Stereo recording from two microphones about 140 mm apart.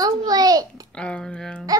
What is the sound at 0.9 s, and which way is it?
Speech, 5° left (ahead or behind).